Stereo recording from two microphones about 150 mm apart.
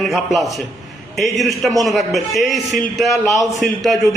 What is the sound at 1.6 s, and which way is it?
A man's voice, centre (ahead or behind).